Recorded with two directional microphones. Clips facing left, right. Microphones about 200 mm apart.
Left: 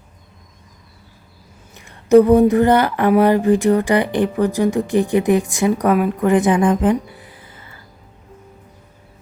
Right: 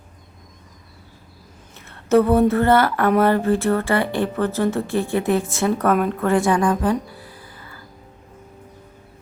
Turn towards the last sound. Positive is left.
turn(degrees=20)  # may be behind; listen again after turning